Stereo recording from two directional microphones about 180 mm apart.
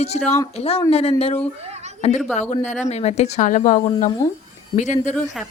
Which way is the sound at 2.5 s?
40° left (ahead or behind).